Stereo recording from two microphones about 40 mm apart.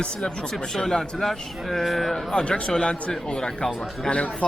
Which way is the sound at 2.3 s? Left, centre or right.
Left.